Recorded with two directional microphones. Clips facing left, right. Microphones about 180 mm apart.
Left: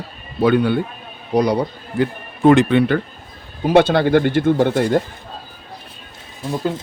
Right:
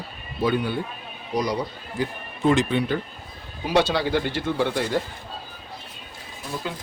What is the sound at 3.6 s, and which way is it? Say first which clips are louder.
Speech: left 8 dB; 55° left (ahead or behind).